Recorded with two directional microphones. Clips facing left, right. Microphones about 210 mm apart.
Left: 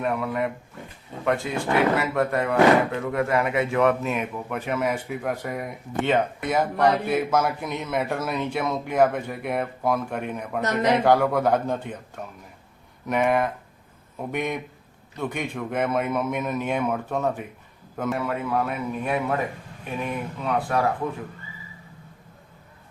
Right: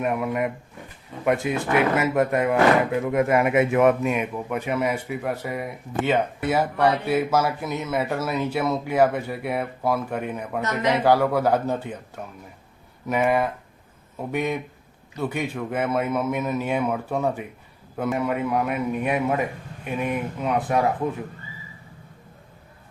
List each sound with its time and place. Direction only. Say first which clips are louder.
0.0 s speech: right 1 dB; 20° right (ahead or behind)
10.6 s a man's voice: left 2 dB; 35° left (ahead or behind)
11.0 s speech: even; 5° right (ahead or behind)